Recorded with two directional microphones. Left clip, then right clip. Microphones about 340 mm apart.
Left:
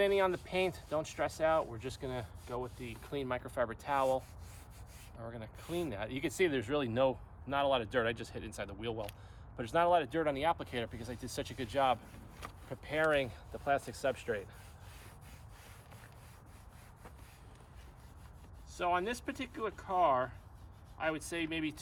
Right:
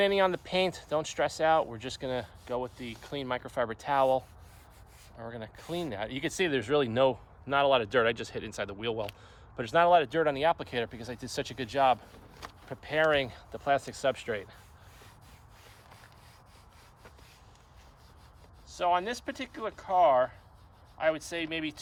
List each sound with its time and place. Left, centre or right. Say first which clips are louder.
0.0 s speech: right 5 dB; right
5.2 s speech: right 5 dB; right
18.7 s speech: right 5 dB; right